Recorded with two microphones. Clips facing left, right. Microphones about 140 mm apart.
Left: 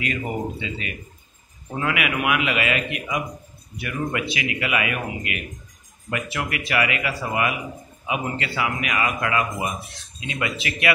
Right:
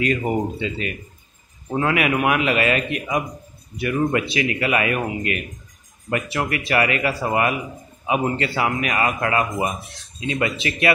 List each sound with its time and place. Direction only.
0.0 s a man's voice: 40° right (ahead or behind)